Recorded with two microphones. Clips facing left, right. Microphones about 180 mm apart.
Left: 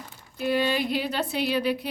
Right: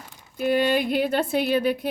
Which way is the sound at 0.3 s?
50° right (ahead or behind).